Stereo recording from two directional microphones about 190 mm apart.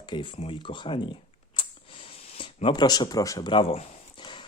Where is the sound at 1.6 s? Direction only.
25° left (ahead or behind).